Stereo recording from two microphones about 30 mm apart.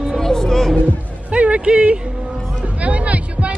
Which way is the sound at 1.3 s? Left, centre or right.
Right.